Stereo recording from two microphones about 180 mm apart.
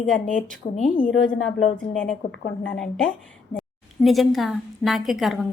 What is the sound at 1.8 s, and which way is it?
A woman's voice, 5° left (ahead or behind).